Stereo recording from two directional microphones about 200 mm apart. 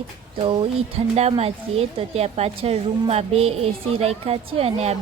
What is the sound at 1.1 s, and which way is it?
A woman's voice, 30° right (ahead or behind).